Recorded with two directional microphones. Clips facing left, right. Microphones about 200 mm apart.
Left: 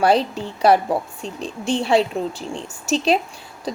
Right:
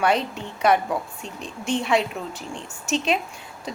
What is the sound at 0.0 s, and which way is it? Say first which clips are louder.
A woman's voice: left 5 dB; 35° left (ahead or behind).